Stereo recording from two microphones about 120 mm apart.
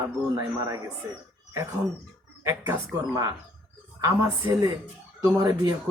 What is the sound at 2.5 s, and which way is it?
A man's voice, 20° right (ahead or behind).